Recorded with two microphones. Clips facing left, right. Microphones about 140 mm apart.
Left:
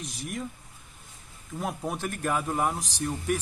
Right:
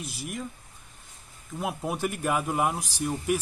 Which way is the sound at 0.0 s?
5° right (ahead or behind).